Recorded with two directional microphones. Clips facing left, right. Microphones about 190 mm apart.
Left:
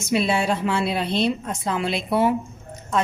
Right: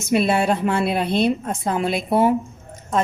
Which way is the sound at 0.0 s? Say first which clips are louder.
Right 3 dB; 55° right (ahead or behind).